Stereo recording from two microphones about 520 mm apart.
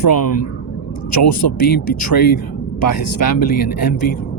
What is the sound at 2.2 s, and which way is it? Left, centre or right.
Speech, centre.